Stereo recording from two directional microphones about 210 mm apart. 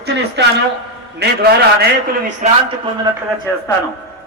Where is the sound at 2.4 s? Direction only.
35° right (ahead or behind).